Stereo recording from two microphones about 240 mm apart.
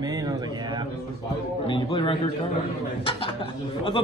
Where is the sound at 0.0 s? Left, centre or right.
Centre.